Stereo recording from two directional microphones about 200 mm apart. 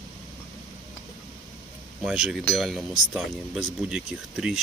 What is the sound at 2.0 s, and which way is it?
Speech, 5° right (ahead or behind).